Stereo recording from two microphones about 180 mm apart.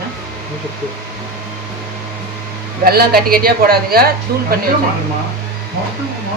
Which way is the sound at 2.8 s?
60° right (ahead or behind).